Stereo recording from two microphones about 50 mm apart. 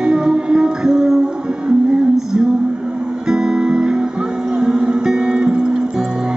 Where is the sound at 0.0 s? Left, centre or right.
Centre.